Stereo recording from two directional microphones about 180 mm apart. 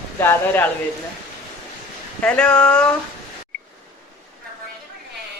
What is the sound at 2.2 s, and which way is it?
Speech, 5° left (ahead or behind).